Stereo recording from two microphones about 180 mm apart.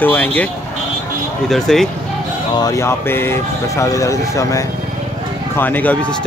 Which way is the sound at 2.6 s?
20° left (ahead or behind).